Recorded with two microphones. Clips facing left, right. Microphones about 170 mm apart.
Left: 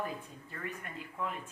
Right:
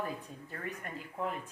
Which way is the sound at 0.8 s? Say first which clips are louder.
Right 2 dB; 45° right (ahead or behind).